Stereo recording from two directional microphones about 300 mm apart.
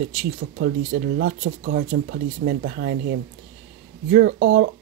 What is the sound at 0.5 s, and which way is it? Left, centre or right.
Speech, right.